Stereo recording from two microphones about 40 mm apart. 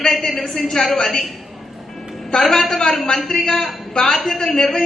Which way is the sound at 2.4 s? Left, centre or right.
Centre.